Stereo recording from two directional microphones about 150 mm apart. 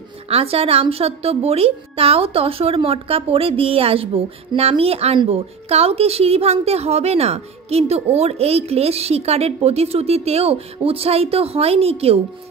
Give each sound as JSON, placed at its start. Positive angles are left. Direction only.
{"t": 0.3, "sound": "a woman's voice", "side_deg": -40}